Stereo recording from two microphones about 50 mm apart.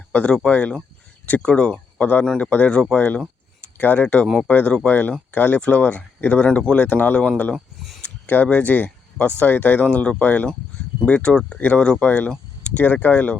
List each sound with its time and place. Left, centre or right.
0.1 s speech: left
2.0 s speech: left
5.5 s speech: left
5.8 s speech: left
6.4 s speech: left
6.8 s speech: left
7.5 s a sound: centre
8.3 s speech: left
9.8 s speech: left